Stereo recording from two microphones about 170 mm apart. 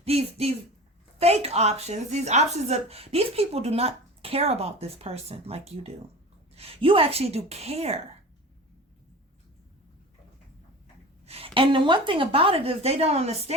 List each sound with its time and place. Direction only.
0.0 s a woman's voice: 35° right (ahead or behind)
11.3 s a woman's voice: 35° right (ahead or behind)